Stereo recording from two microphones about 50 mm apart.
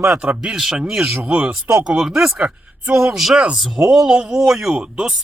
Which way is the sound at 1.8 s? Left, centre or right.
Centre.